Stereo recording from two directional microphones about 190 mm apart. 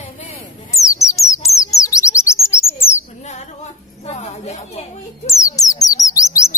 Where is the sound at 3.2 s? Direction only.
35° left (ahead or behind).